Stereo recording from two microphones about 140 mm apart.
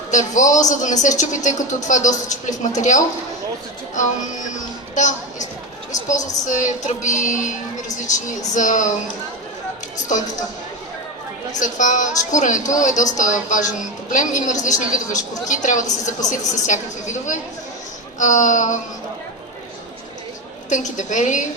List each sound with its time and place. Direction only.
0.1 s a woman's voice: 60° left (ahead or behind)
4.9 s a woman's voice: 60° left (ahead or behind)
8.5 s a woman's voice: 65° left (ahead or behind)
11.6 s a woman's voice: 65° left (ahead or behind)
20.7 s a woman's voice: 60° left (ahead or behind)